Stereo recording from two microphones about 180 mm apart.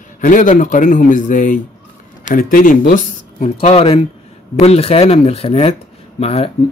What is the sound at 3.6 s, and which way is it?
Speech, 35° left (ahead or behind).